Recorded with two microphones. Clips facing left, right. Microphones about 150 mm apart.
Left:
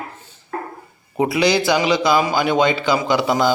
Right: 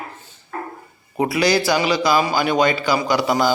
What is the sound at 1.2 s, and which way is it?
A man's voice, 20° left (ahead or behind).